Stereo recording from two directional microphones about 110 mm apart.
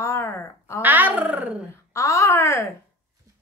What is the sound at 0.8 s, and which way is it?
Speech, 15° right (ahead or behind).